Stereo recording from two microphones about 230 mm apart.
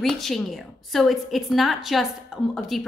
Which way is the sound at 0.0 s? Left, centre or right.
Centre.